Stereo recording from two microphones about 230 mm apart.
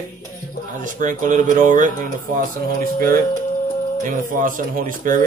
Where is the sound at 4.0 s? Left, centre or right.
Right.